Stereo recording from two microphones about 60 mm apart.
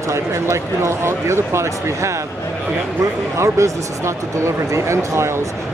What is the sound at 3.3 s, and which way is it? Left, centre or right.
Speech, right.